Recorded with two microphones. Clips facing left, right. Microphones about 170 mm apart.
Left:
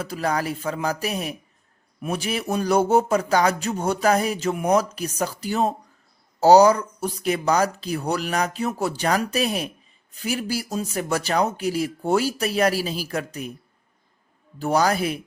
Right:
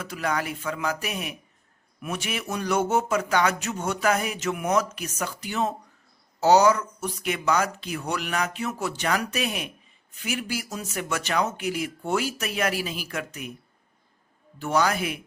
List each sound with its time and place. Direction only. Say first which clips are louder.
0.0 s speech: left 3 dB; 35° left (ahead or behind)
14.6 s speech: left 3 dB; 35° left (ahead or behind)